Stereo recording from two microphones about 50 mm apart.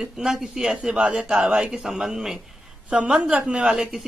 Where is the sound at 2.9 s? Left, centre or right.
Right.